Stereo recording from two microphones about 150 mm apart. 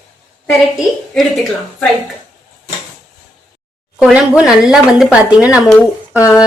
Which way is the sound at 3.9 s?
5° right (ahead or behind).